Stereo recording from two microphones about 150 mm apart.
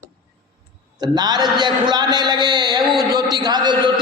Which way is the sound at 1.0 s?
30° right (ahead or behind).